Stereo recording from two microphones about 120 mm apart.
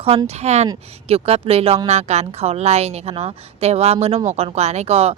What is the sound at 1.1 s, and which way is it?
A woman's voice, 55° right (ahead or behind).